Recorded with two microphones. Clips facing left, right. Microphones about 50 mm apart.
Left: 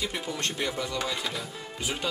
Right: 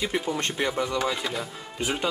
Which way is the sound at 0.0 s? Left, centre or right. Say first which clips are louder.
Right 5 dB; right.